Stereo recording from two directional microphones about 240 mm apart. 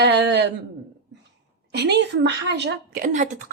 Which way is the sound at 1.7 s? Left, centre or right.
Right.